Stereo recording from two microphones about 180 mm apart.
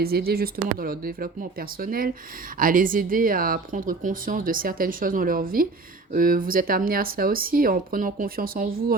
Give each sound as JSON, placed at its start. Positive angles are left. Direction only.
{"t": 0.0, "sound": "speech", "side_deg": -60}